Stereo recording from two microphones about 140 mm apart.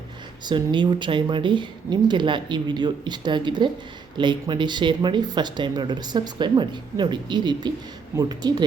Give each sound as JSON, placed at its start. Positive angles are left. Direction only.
{"t": 0.4, "sound": "speech", "side_deg": -35}